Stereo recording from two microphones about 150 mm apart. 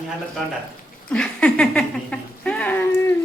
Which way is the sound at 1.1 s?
5° left (ahead or behind).